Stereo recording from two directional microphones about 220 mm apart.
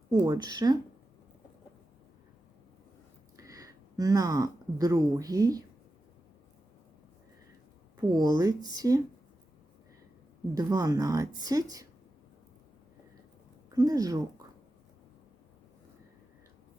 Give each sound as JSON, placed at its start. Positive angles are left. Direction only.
{"t": 0.1, "sound": "speech", "side_deg": -15}
{"t": 3.3, "sound": "speech", "side_deg": -15}
{"t": 8.1, "sound": "speech", "side_deg": -20}
{"t": 10.5, "sound": "speech", "side_deg": -15}
{"t": 13.7, "sound": "speech", "side_deg": -15}